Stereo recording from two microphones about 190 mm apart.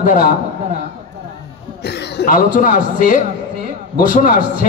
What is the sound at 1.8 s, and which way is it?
Speech, 60° left (ahead or behind).